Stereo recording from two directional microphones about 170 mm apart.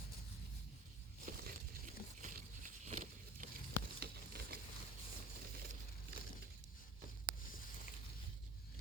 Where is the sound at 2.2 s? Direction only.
50° right (ahead or behind).